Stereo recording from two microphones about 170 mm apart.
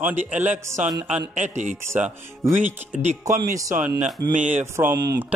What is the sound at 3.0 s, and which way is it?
Speech, 45° right (ahead or behind).